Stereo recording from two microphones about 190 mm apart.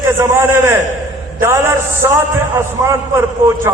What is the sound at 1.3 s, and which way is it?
A man's voice, 10° right (ahead or behind).